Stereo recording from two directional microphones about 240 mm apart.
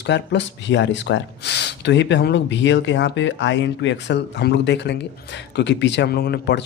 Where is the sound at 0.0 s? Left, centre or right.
Left.